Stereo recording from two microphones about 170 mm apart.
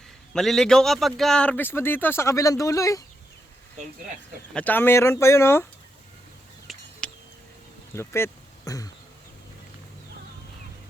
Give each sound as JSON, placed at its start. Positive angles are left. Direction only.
{"t": 0.3, "sound": "a man's voice", "side_deg": 0}
{"t": 4.5, "sound": "a man's voice", "side_deg": 10}
{"t": 6.7, "sound": "a sound", "side_deg": 0}
{"t": 7.9, "sound": "speech", "side_deg": 15}